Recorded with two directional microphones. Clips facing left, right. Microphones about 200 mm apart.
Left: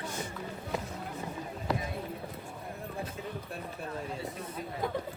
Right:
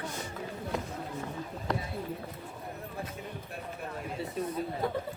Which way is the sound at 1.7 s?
5° left (ahead or behind).